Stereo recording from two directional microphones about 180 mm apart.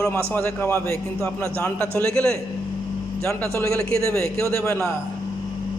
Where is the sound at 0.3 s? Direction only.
15° left (ahead or behind).